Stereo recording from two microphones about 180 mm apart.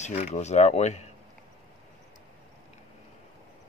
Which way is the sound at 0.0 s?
40° left (ahead or behind).